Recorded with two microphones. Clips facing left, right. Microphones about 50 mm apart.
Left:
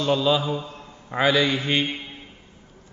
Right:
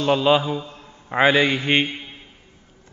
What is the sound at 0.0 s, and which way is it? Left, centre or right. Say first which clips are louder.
A man's voice: right 3 dB; right.